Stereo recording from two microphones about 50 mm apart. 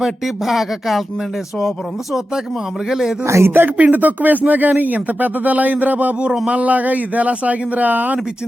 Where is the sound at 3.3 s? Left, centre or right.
Right.